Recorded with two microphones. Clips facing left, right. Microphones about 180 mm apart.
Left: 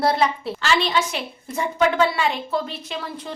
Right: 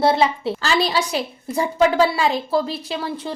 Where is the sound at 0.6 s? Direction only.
35° right (ahead or behind).